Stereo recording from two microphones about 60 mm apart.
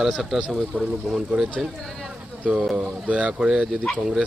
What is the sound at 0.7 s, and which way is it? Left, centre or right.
Speech, right.